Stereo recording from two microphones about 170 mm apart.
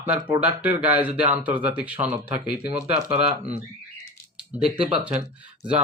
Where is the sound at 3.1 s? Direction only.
40° right (ahead or behind).